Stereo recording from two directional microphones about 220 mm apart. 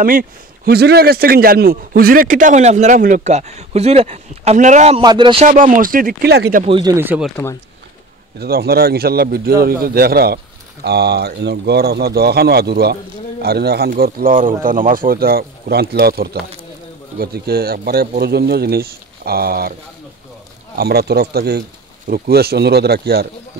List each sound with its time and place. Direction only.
0.0 s a man's voice: 40° right (ahead or behind); by 5.5 s 25° right (ahead or behind)
5.5 s a man's voice: 40° right (ahead or behind)
6.6 s speech: 20° right (ahead or behind); by 7.4 s centre (ahead or behind)
8.4 s a man's voice: 45° right (ahead or behind)
20.7 s a man's voice: 45° right (ahead or behind)